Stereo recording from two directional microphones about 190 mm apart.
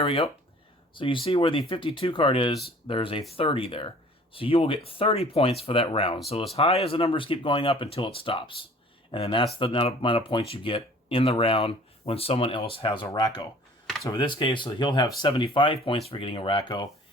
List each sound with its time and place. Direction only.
0.0 s speech: 30° left (ahead or behind)